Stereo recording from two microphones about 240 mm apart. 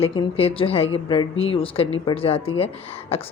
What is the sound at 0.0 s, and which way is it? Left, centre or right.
A woman's voice, left.